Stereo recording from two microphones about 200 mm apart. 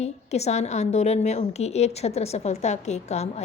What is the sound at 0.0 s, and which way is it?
A woman's voice, 35° left (ahead or behind).